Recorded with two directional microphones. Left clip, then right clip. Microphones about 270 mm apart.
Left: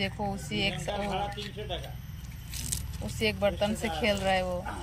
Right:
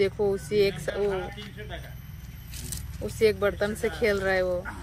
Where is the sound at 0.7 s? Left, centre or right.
Right.